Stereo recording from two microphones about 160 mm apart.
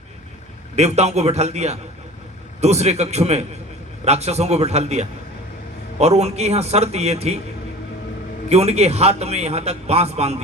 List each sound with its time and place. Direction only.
0.8 s a man's voice: 45° right (ahead or behind)
8.4 s a man's voice: 40° right (ahead or behind)